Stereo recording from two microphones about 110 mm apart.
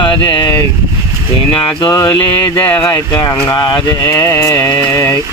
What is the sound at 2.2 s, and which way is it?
Speech, 50° left (ahead or behind).